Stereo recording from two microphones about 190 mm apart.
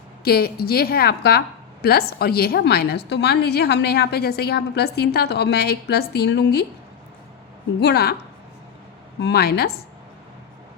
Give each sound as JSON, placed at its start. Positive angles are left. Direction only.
{"t": 0.3, "sound": "a woman's voice", "side_deg": 55}
{"t": 7.8, "sound": "a woman's voice", "side_deg": 60}
{"t": 9.2, "sound": "a woman's voice", "side_deg": 60}